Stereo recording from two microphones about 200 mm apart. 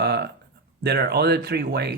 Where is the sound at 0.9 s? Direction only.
55° right (ahead or behind).